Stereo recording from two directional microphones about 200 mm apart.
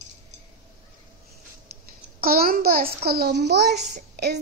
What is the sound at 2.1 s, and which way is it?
A child's voice, 50° right (ahead or behind).